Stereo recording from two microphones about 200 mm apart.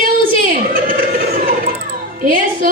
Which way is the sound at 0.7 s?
45° right (ahead or behind).